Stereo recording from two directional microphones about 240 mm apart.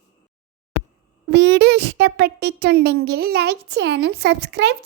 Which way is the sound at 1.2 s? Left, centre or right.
Right.